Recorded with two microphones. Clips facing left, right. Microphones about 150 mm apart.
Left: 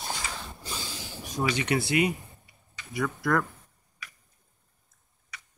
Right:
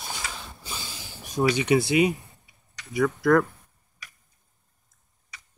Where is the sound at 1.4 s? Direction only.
15° right (ahead or behind).